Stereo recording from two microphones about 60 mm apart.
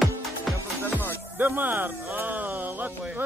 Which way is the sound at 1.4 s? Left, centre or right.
Right.